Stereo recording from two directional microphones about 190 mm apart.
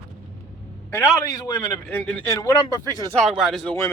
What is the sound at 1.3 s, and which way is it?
Speech, 20° left (ahead or behind).